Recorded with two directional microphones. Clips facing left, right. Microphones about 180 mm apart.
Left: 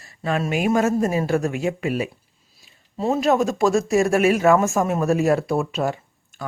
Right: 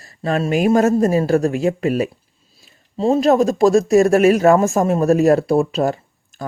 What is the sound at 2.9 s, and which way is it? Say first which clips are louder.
Speech: right 5 dB; 30° right (ahead or behind).